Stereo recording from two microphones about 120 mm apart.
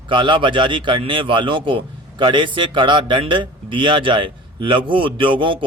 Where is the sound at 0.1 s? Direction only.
40° right (ahead or behind).